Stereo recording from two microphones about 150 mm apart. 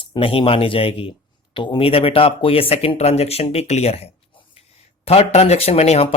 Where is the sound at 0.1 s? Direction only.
35° left (ahead or behind).